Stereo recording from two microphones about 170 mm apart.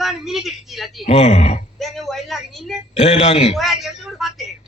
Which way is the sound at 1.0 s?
40° left (ahead or behind).